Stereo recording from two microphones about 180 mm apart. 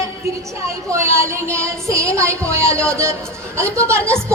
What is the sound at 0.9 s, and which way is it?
Child singing, 15° right (ahead or behind).